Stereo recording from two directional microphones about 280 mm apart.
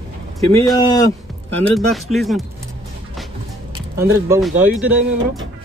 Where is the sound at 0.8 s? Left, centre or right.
Centre.